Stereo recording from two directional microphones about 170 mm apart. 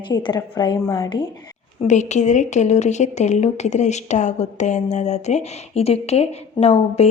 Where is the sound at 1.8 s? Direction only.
45° left (ahead or behind).